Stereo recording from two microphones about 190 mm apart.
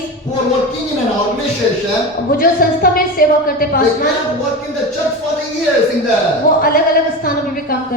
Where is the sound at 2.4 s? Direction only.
50° left (ahead or behind).